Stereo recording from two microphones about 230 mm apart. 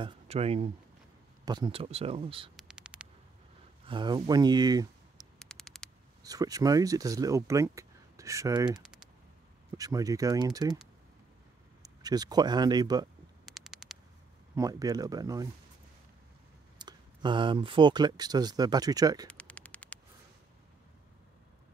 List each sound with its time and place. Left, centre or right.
0.0 s speech: right
2.5 s a sound: centre
3.8 s speech: right
5.4 s mouse: centre
6.2 s speech: centre
8.8 s typing: centre
9.7 s speech: centre
11.8 s speech: centre
13.5 s a sound: centre
14.5 s speech: centre
16.7 s speech: centre
19.2 s a sound: centre